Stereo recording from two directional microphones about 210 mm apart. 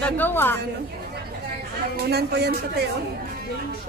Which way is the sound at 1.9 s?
50° right (ahead or behind).